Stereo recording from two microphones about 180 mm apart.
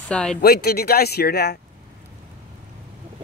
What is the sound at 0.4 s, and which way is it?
Speech, 60° left (ahead or behind).